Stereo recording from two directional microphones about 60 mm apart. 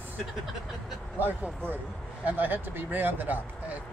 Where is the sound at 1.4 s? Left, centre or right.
Right.